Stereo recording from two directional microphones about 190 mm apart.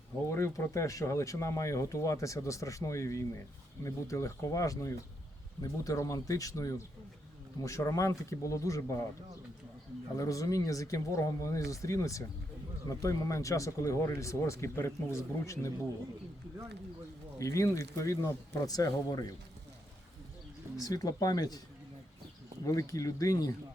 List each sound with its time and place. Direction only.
0.3 s speech: 15° left (ahead or behind)
10.2 s speech: 15° left (ahead or behind)
17.3 s speech: 15° left (ahead or behind)
20.7 s speech: 20° left (ahead or behind)
22.6 s speech: 15° left (ahead or behind)